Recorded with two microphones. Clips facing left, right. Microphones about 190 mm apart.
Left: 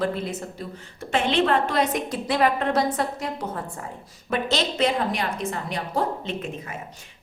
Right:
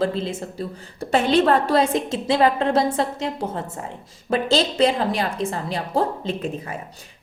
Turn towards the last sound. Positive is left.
turn(degrees=-35)  # may be behind; listen again after turning